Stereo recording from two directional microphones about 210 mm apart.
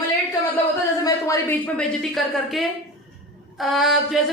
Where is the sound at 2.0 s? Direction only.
Centre (ahead or behind).